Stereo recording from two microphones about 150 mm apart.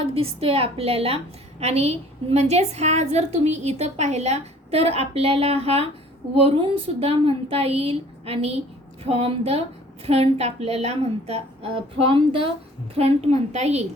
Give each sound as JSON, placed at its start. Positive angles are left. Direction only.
{"t": 0.0, "sound": "a woman's voice", "side_deg": -40}